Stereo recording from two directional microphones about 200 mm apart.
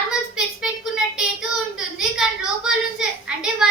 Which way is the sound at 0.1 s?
5° right (ahead or behind).